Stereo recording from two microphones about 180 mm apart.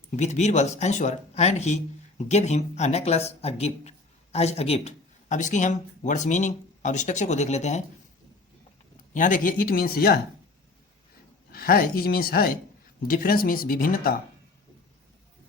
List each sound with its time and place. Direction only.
0.2 s speech: 40° left (ahead or behind)
9.1 s speech: 45° left (ahead or behind)
11.5 s speech: 55° left (ahead or behind)